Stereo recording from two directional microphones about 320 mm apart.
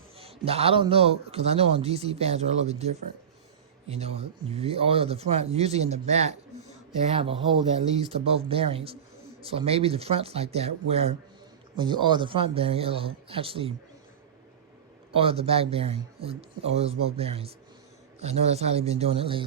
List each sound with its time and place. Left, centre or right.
0.2 s a man's voice: centre
15.1 s a man's voice: centre